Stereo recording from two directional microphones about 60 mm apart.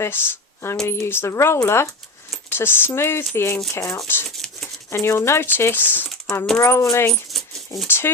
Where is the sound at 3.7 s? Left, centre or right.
Left.